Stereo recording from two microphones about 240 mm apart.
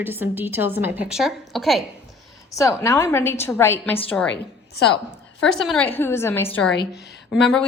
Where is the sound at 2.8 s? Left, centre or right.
Centre.